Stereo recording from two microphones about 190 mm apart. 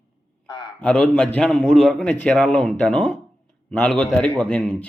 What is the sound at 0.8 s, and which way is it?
A man's voice, 5° left (ahead or behind).